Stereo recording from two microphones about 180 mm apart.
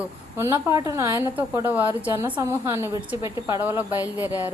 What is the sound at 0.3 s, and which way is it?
A woman's voice, 15° right (ahead or behind).